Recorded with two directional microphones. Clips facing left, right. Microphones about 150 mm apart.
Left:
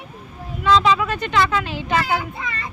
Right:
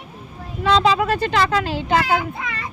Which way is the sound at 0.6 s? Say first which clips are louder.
Even; 35° right (ahead or behind).